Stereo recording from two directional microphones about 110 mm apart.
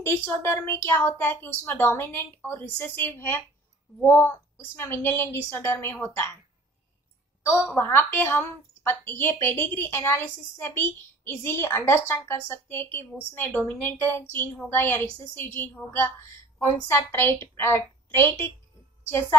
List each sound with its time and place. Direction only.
0.0 s a woman's voice: 25° left (ahead or behind)
7.7 s a woman's voice: 20° left (ahead or behind)